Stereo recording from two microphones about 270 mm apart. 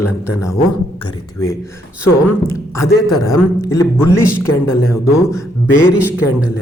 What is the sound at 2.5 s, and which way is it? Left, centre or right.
Speech, centre.